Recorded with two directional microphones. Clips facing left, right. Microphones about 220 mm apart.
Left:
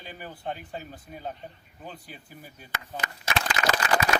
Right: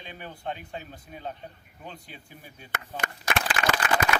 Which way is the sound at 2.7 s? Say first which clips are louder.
Right 2 dB; 50° right (ahead or behind).